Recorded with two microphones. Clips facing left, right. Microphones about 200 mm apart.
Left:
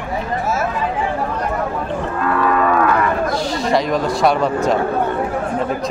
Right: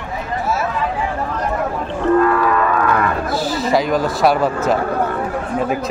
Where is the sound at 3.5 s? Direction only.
Centre (ahead or behind).